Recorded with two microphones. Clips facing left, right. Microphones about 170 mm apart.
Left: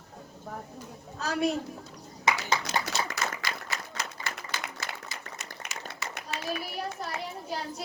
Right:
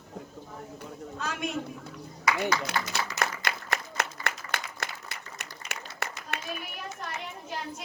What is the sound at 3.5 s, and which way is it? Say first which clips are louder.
Applause: right 3 dB; 60° right (ahead or behind).